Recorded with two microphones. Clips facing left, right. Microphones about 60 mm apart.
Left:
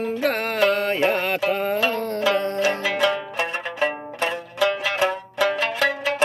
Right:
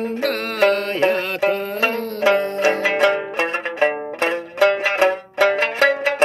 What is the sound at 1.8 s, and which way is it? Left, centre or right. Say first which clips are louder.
Music: right 2 dB; right.